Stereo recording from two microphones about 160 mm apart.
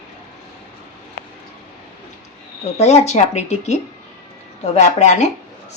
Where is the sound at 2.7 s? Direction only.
45° left (ahead or behind).